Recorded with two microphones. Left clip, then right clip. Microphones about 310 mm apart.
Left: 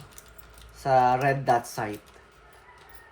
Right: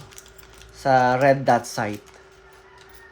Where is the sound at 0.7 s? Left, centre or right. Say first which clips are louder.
Right 3 dB; right.